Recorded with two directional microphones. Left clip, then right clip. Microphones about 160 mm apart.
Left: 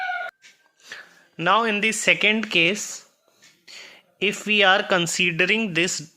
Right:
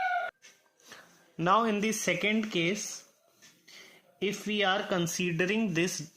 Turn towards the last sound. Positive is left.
turn(degrees=15)  # may be behind; listen again after turning